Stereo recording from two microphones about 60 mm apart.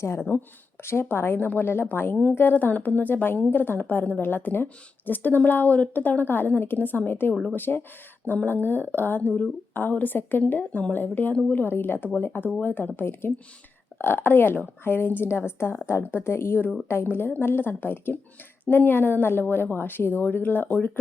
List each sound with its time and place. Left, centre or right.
0.0 s a woman's voice: left